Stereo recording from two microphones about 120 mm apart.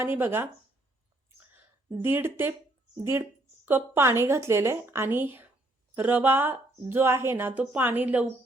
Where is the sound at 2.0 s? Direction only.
20° right (ahead or behind).